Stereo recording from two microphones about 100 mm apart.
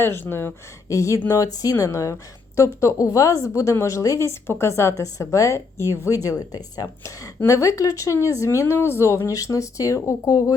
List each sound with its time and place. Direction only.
0.0 s speech: 25° left (ahead or behind)
0.9 s speech: 30° left (ahead or behind)